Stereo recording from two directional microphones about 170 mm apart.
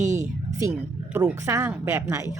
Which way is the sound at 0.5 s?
15° right (ahead or behind).